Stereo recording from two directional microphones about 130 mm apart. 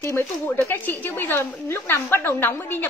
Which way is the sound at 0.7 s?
15° left (ahead or behind).